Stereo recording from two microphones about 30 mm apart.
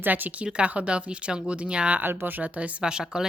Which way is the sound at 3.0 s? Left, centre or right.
Centre.